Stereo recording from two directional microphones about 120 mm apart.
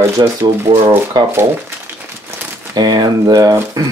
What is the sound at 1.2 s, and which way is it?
Speech, 35° right (ahead or behind).